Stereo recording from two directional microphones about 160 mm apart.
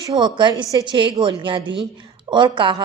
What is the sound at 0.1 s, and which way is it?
A woman's voice, 25° right (ahead or behind).